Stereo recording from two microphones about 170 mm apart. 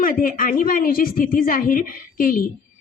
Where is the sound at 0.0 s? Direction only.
55° left (ahead or behind).